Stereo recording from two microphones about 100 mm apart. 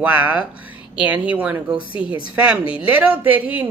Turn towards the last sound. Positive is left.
turn(degrees=-15)  # may be behind; listen again after turning